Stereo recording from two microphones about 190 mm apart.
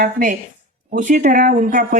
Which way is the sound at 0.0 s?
45° right (ahead or behind).